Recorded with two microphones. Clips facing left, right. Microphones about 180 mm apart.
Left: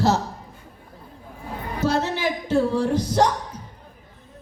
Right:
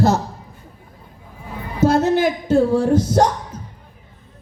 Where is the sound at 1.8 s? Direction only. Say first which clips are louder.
Right 8 dB; 50° right (ahead or behind).